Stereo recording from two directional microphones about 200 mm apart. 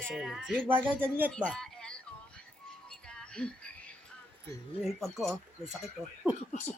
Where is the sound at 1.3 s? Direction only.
5° left (ahead or behind).